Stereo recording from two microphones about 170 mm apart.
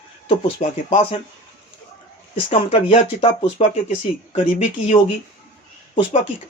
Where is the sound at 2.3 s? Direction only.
35° left (ahead or behind).